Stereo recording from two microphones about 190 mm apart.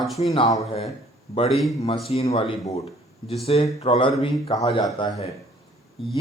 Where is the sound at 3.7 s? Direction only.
30° left (ahead or behind).